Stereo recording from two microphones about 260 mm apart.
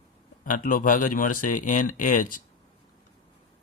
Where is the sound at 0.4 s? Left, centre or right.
Left.